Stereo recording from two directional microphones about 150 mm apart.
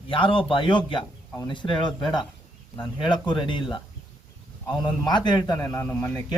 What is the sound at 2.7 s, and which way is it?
A man's voice, 30° left (ahead or behind).